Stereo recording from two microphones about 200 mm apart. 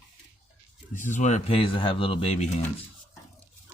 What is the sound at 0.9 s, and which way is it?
Speech, 40° left (ahead or behind).